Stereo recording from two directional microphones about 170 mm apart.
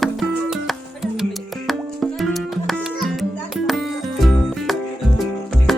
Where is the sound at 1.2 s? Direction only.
Centre (ahead or behind).